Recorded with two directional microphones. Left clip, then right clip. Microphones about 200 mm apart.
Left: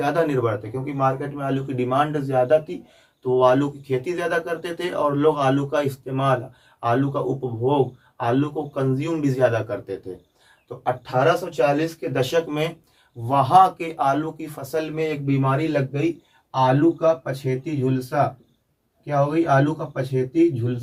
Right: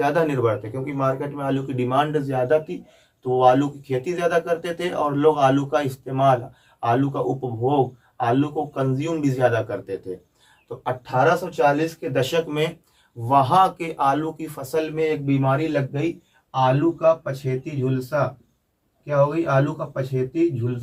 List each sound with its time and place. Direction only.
0.0 s speech: 15° right (ahead or behind); by 20.5 s centre (ahead or behind)